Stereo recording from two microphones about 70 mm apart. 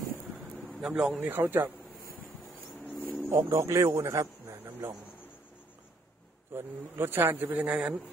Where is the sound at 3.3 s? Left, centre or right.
Right.